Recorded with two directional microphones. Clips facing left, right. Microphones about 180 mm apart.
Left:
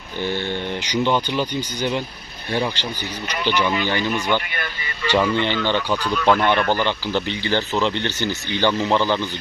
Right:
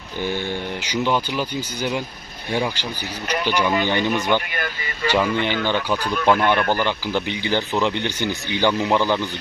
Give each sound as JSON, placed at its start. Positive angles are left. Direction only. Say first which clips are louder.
{"t": 0.2, "sound": "speech", "louder": "left 1 dB", "side_deg": -10}